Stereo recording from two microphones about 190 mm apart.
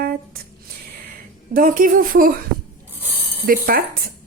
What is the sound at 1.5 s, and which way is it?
Speech, 45° right (ahead or behind).